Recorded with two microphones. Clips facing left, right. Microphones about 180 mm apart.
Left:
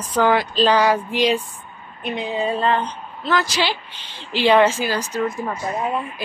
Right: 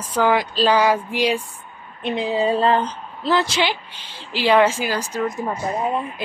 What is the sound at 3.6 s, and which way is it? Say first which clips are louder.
Speech: right 1 dB; 10° right (ahead or behind).